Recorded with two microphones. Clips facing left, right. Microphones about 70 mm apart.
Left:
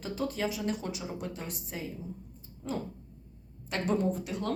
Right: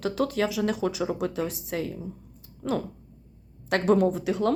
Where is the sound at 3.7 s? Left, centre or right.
Right.